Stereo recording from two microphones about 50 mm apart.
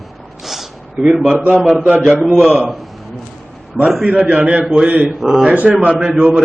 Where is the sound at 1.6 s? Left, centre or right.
Centre.